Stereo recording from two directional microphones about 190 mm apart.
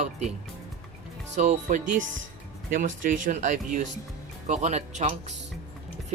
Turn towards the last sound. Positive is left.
turn(degrees=-35)  # may be behind; listen again after turning